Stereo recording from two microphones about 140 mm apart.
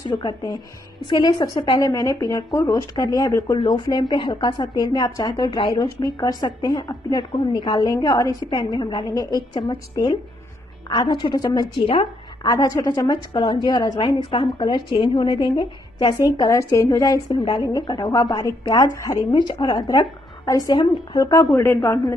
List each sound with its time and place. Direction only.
0.1 s a woman's voice: 30° left (ahead or behind)
12.4 s a woman's voice: 25° left (ahead or behind)